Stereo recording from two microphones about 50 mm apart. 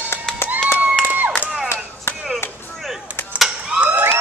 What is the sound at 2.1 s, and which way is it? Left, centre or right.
Chop, left.